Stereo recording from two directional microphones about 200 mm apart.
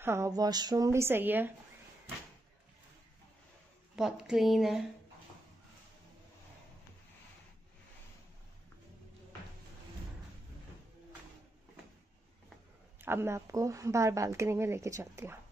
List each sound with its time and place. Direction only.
0.0 s speech: 15° right (ahead or behind)
3.9 s speech: 5° right (ahead or behind)
13.0 s speech: 10° right (ahead or behind)